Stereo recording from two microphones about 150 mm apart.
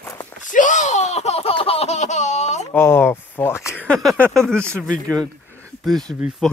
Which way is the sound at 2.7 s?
15° left (ahead or behind).